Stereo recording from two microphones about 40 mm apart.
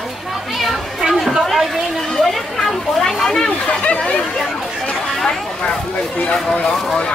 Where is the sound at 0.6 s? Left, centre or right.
Centre.